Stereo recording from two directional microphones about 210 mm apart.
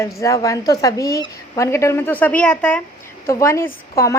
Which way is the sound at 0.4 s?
15° left (ahead or behind).